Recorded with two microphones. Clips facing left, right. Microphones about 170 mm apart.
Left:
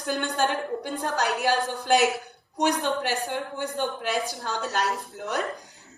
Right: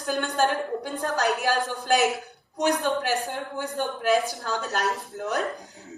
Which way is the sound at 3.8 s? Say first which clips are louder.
Right 5 dB; 50° right (ahead or behind).